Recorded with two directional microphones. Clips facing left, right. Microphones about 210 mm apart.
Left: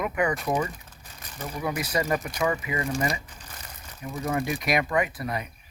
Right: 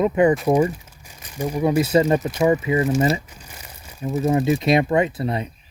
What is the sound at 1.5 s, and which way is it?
Speech, 25° right (ahead or behind).